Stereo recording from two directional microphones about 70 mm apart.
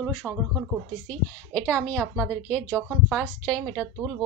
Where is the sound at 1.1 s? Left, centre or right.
Centre.